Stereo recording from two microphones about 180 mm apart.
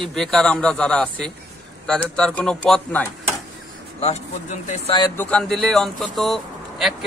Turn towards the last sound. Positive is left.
turn(degrees=0)  # may be behind; listen again after turning